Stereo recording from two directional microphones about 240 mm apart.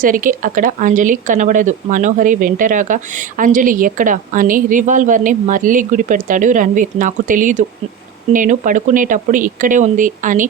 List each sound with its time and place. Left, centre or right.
0.0 s speech: right